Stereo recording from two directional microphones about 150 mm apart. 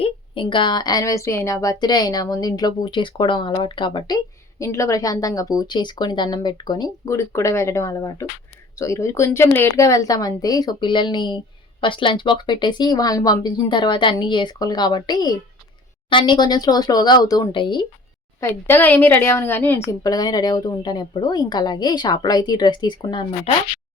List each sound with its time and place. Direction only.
0.0 s a woman's voice: 35° left (ahead or behind)
4.6 s a woman's voice: 20° left (ahead or behind)
18.3 s a woman's voice: 15° left (ahead or behind)
20.0 s a woman's voice: 25° left (ahead or behind)